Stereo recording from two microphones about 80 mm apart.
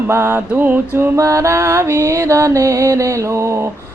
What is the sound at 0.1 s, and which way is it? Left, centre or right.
Mantra, right.